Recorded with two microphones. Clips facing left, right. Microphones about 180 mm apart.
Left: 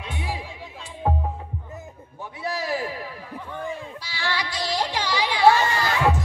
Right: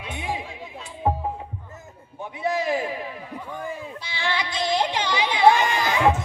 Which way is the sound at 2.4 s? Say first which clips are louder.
Right 3 dB; 20° right (ahead or behind).